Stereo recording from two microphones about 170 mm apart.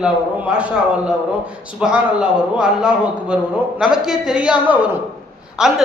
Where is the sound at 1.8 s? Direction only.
5° right (ahead or behind).